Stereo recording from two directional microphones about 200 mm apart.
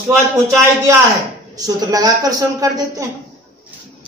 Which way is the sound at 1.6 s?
20° right (ahead or behind).